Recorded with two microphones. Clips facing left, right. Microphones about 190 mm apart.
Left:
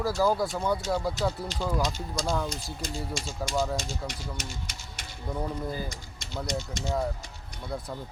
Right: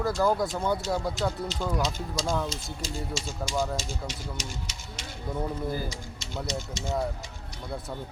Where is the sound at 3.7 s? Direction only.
55° left (ahead or behind).